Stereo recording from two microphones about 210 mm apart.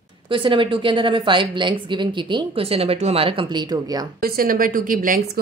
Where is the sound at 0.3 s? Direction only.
25° right (ahead or behind).